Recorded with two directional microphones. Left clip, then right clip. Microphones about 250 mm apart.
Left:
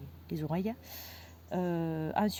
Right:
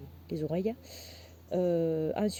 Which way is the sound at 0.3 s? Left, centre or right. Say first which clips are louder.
Right 4 dB; left.